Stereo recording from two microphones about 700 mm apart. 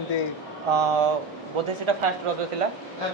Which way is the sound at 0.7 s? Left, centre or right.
Right.